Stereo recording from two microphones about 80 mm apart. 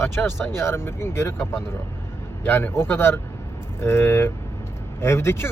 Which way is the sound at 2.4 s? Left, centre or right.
Left.